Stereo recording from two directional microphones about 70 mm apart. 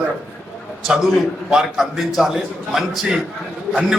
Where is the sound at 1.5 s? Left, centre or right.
Centre.